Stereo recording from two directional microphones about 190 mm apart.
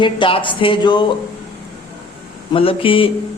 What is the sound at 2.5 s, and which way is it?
Speech, 30° left (ahead or behind).